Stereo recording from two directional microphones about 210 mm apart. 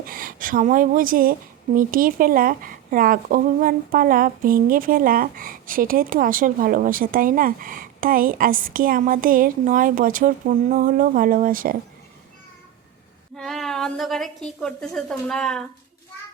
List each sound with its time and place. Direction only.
0.0 s speech: 40° right (ahead or behind)
13.3 s a woman's voice: centre (ahead or behind)